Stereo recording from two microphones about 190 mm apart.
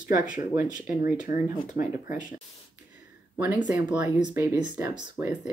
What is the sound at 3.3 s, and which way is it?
Speech, 15° right (ahead or behind).